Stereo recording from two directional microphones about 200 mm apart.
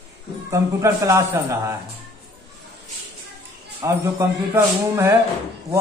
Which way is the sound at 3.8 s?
15° right (ahead or behind).